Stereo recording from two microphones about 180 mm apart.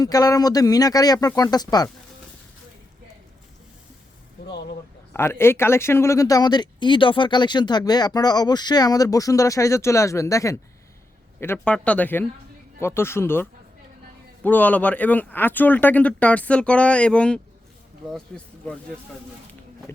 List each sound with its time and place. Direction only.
0.0 s speech: 20° left (ahead or behind)
5.1 s speech: 15° left (ahead or behind)